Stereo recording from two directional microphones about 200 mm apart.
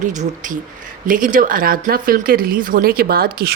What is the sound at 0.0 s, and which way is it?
A woman's voice, 40° right (ahead or behind).